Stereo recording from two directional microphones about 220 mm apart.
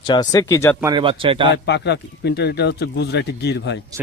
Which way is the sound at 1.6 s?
50° left (ahead or behind).